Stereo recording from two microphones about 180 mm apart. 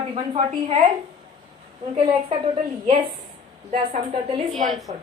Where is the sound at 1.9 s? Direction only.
35° right (ahead or behind).